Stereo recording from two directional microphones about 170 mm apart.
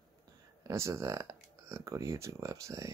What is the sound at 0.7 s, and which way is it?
Speech, 15° right (ahead or behind).